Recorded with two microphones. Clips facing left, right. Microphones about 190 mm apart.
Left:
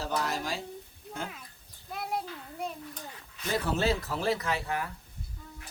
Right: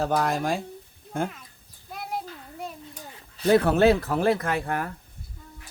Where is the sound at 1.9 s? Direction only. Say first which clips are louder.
Right 1 dB; centre (ahead or behind).